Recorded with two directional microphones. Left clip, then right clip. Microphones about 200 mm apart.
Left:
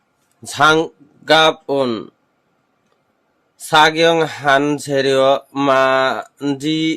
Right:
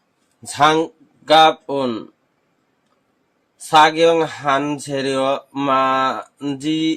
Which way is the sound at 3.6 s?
45° left (ahead or behind).